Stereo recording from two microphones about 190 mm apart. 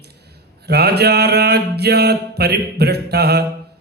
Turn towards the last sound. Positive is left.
turn(degrees=-60)  # may be behind; listen again after turning